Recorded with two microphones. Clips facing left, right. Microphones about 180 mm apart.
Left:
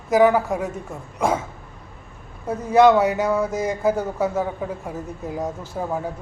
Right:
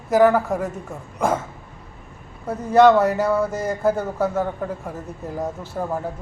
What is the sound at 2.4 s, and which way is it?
A man's voice, centre (ahead or behind).